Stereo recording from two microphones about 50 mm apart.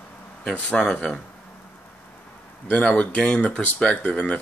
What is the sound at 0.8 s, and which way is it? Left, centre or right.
Speech, centre.